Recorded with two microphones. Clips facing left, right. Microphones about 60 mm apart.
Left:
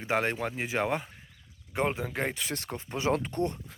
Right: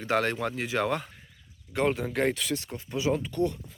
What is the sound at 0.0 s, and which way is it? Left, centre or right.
Speech, centre.